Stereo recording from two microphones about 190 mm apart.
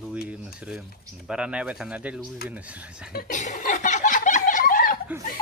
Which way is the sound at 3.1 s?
45° left (ahead or behind).